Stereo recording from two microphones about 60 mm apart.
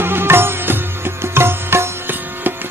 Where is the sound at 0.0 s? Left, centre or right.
Right.